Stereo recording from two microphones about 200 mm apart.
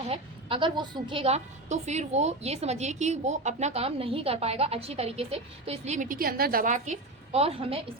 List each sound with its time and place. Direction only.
0.1 s a woman's voice: 25° right (ahead or behind)